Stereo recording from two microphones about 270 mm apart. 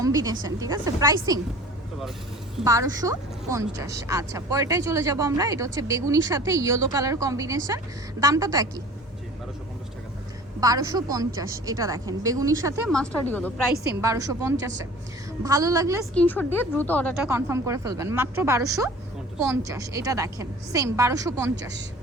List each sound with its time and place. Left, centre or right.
0.0 s speech: centre
2.6 s speech: centre
10.6 s speech: centre
12.9 s speech: centre
14.0 s speech: centre
16.1 s speech: centre
17.2 s speech: centre
21.5 s speech: right